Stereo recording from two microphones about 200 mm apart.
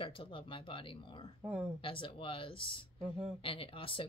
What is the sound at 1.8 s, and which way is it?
Speech, 25° left (ahead or behind).